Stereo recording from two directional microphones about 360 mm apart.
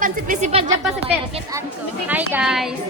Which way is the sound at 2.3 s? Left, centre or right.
Centre.